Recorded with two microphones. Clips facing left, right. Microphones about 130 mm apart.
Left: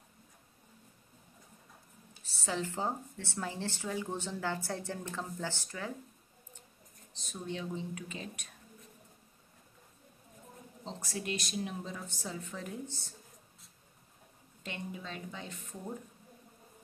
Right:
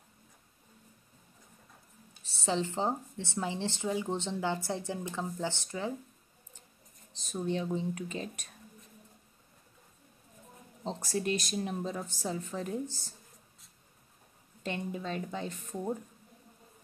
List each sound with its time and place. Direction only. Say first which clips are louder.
2.2 s a woman's voice: right 4 dB; 25° right (ahead or behind)
7.4 s speech: right 6 dB; 35° right (ahead or behind)
10.8 s speech: right 7 dB; 40° right (ahead or behind)
14.6 s speech: right 6 dB; 40° right (ahead or behind)